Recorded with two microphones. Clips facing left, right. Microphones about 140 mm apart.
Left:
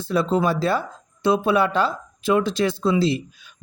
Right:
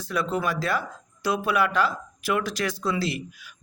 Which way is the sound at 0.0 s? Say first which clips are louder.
Left 6 dB; 30° left (ahead or behind).